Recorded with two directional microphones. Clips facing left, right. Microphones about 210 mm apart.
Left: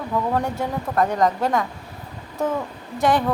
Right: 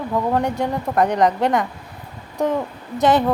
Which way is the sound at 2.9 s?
20° right (ahead or behind).